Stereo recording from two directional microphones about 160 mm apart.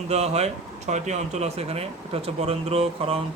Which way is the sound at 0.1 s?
40° right (ahead or behind).